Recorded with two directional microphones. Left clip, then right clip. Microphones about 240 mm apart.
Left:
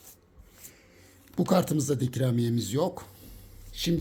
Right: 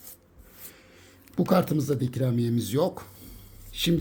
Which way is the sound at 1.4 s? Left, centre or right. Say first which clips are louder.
Right 2 dB; centre.